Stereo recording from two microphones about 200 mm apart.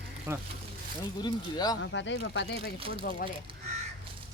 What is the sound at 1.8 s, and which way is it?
Speech, 65° left (ahead or behind).